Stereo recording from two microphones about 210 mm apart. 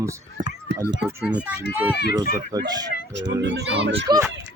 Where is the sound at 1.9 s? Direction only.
50° left (ahead or behind).